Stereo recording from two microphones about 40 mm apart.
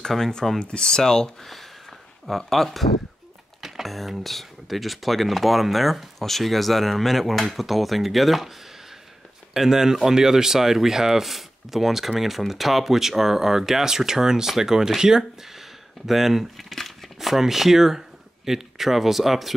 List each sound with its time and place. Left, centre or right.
0.3 s speech: centre
1.4 s a sound: centre
3.8 s speech: centre
9.5 s speech: centre